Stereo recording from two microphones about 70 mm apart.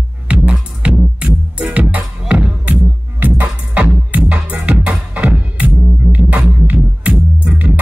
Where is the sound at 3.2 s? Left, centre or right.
Right.